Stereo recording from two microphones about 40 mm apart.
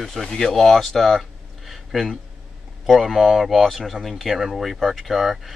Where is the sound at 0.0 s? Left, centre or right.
Centre.